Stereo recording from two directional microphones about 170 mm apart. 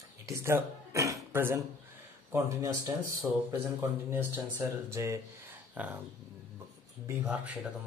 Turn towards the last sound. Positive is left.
turn(degrees=-10)  # may be behind; listen again after turning